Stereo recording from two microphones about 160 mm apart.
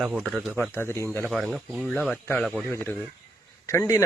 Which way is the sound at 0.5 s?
15° left (ahead or behind).